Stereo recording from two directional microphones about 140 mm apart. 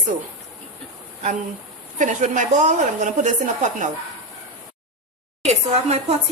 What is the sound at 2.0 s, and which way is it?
A woman's voice, 65° right (ahead or behind).